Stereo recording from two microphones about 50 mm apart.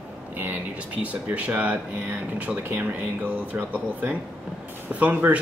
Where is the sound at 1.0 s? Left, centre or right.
Right.